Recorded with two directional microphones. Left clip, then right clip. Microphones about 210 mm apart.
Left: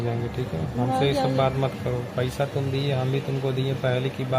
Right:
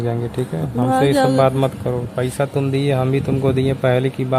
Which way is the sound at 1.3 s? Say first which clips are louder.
Right 8 dB; 25° right (ahead or behind).